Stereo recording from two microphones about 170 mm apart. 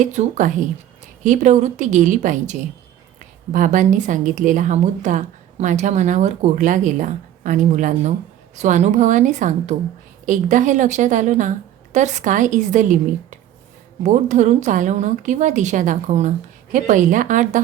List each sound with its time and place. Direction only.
0.0 s a woman's voice: 45° right (ahead or behind)
14.0 s a woman's voice: 45° right (ahead or behind)